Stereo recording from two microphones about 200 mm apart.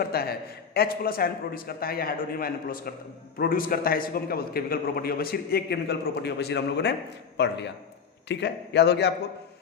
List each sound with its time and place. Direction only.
0.0 s a man's voice: 50° left (ahead or behind)